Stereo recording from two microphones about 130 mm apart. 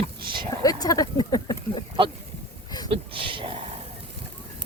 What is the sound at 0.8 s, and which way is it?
Speech, 30° left (ahead or behind).